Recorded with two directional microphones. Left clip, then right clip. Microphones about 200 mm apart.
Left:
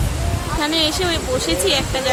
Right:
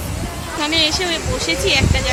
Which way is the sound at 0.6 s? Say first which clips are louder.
Right 2 dB; 10° left (ahead or behind).